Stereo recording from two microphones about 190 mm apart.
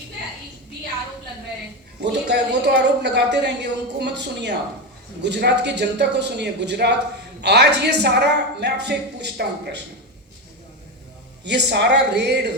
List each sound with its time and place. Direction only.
2.0 s a man's voice: 60° right (ahead or behind)
11.4 s a man's voice: 60° right (ahead or behind)